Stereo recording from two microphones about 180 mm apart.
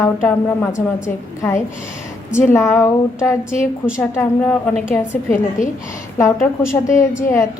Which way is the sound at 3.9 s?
15° left (ahead or behind).